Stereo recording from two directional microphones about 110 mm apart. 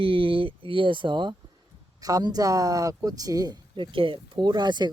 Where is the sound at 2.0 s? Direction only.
35° right (ahead or behind).